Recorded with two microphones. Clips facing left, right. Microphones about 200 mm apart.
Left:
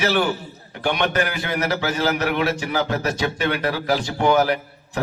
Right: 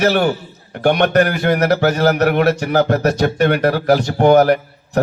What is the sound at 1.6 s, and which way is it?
Speech, 65° right (ahead or behind).